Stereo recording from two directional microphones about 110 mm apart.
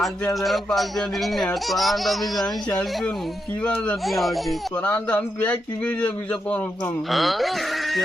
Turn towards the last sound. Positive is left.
turn(degrees=0)  # may be behind; listen again after turning